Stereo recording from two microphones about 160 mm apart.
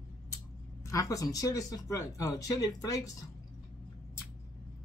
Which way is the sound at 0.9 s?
20° left (ahead or behind).